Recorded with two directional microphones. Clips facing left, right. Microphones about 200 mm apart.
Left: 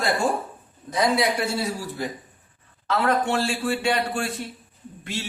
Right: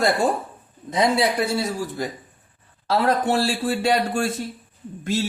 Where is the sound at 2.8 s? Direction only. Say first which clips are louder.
Right 2 dB; 35° right (ahead or behind).